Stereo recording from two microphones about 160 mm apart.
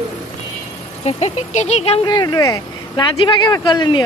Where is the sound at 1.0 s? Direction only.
45° left (ahead or behind).